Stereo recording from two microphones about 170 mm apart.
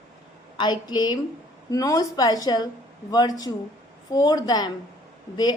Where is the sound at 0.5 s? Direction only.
25° left (ahead or behind).